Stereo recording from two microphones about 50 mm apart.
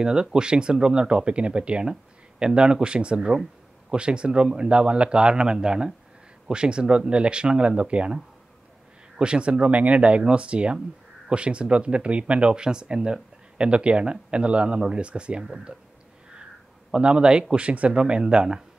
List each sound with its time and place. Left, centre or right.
0.0 s speech: centre
9.2 s speech: right
16.9 s speech: centre